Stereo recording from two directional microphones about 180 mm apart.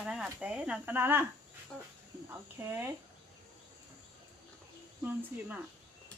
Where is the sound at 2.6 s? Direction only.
10° right (ahead or behind).